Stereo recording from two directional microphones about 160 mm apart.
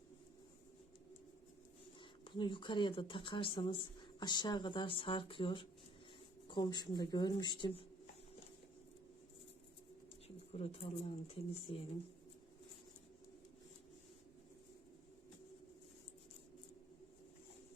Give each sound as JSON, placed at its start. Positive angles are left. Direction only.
{"t": 2.0, "sound": "speech", "side_deg": 30}
{"t": 10.2, "sound": "speech", "side_deg": 40}